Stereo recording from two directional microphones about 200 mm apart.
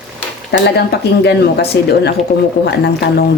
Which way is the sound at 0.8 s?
55° left (ahead or behind).